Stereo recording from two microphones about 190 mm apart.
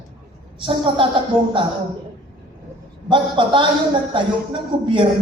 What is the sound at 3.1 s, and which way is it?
A woman's voice, 25° right (ahead or behind).